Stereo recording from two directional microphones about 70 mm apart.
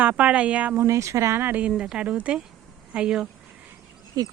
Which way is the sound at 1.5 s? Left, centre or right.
Right.